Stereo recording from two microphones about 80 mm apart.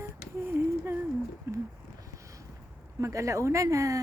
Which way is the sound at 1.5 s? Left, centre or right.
Right.